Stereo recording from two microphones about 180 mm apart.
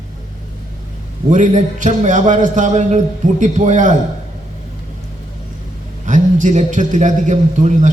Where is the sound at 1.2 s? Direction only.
45° right (ahead or behind).